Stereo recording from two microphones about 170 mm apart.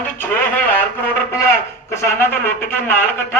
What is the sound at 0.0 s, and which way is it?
Speech, 10° left (ahead or behind).